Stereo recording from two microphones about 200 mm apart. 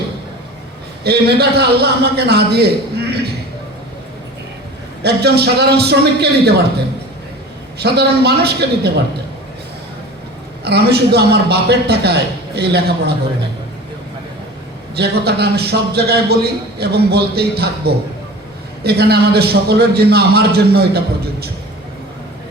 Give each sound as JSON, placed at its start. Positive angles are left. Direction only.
{"t": 1.0, "sound": "a man's voice", "side_deg": -55}
{"t": 5.0, "sound": "a man's voice", "side_deg": -55}
{"t": 7.8, "sound": "a man's voice", "side_deg": -55}
{"t": 10.6, "sound": "a man's voice", "side_deg": -55}
{"t": 14.9, "sound": "a man's voice", "side_deg": -55}